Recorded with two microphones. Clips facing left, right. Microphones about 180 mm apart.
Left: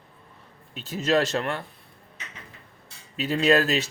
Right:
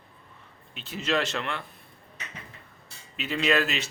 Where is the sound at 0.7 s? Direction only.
40° left (ahead or behind).